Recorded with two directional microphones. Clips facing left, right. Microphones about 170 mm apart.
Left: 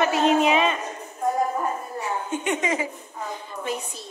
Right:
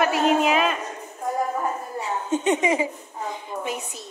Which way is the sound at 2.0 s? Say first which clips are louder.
Right 5 dB; 20° right (ahead or behind).